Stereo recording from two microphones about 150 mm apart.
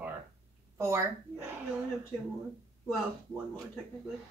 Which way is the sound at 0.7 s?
20° right (ahead or behind).